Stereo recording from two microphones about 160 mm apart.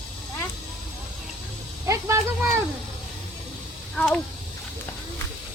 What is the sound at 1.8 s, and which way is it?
Speech, 15° right (ahead or behind).